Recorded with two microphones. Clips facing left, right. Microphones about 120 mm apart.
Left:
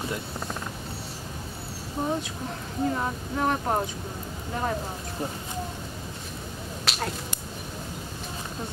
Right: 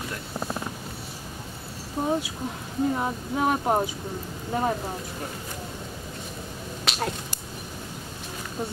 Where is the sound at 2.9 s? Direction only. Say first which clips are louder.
Right 2 dB; 10° right (ahead or behind).